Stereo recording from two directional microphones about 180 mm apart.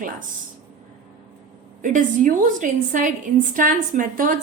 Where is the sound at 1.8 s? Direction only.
45° right (ahead or behind).